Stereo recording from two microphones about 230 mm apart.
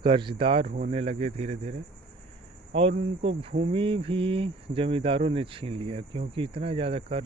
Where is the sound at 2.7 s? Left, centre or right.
Right.